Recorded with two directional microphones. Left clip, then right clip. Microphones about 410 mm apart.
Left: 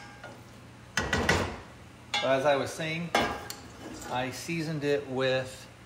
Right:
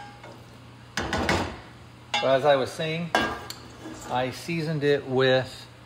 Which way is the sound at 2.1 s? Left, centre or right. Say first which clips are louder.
Right 5 dB; right.